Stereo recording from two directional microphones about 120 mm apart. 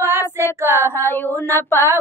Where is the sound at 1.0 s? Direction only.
20° left (ahead or behind).